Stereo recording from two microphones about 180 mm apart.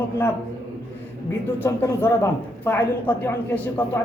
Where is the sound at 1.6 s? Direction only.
15° left (ahead or behind).